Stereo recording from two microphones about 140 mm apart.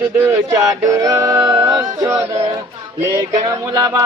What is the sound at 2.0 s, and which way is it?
Music, 20° right (ahead or behind).